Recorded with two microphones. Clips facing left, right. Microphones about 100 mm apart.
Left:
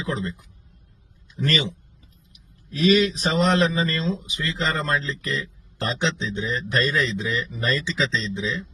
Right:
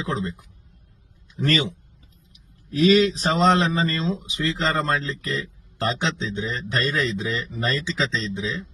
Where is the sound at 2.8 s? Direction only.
25° right (ahead or behind).